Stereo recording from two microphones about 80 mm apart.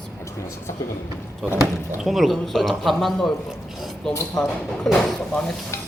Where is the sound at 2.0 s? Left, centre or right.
Centre.